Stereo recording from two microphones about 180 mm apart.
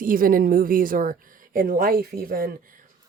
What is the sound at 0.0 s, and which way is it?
A woman's voice, 50° right (ahead or behind).